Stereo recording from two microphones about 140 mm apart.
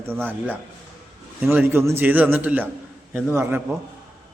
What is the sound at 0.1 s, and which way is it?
Speech, 15° right (ahead or behind).